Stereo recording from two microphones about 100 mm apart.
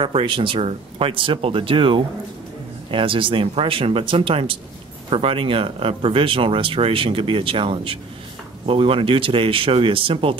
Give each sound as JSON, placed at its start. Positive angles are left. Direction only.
{"t": 0.0, "sound": "speech", "side_deg": -60}